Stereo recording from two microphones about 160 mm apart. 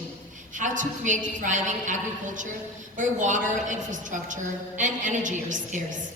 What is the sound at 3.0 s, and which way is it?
A woman's voice, 55° right (ahead or behind).